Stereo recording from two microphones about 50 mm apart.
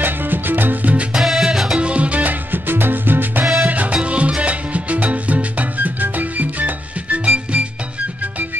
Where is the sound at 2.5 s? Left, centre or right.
Right.